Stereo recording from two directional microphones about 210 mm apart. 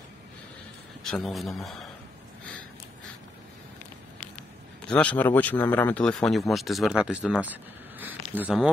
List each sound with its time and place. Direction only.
1.0 s speech: centre (ahead or behind)
4.8 s a man's voice: 5° left (ahead or behind)
8.0 s a sound: 10° right (ahead or behind)